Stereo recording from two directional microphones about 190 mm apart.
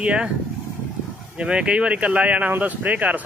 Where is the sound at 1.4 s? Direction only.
5° right (ahead or behind).